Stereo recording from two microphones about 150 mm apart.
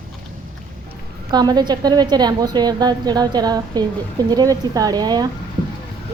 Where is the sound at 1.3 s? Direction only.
25° right (ahead or behind).